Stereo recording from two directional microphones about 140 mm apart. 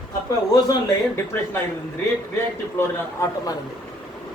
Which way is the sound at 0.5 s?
25° left (ahead or behind).